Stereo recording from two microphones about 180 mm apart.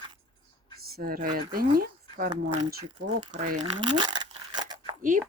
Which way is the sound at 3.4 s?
40° right (ahead or behind).